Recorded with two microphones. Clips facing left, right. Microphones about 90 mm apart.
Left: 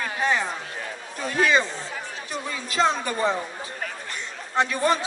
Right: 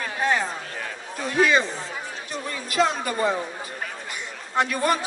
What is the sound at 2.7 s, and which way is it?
Speech, 30° left (ahead or behind).